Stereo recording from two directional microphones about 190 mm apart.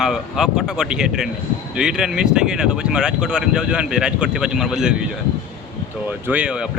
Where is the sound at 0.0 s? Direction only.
Centre (ahead or behind).